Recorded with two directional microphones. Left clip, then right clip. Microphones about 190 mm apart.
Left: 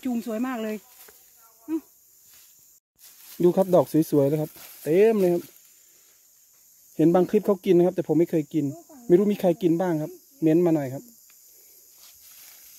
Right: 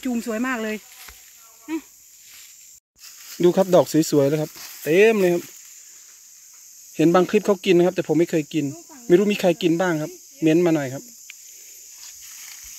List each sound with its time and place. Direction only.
0.0 s speech: 5° right (ahead or behind)
3.3 s speech: 10° left (ahead or behind)
4.6 s snake: 40° left (ahead or behind)
4.8 s speech: 5° left (ahead or behind)
7.0 s speech: 5° left (ahead or behind)